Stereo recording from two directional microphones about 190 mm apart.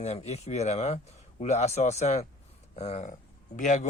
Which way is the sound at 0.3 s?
35° left (ahead or behind).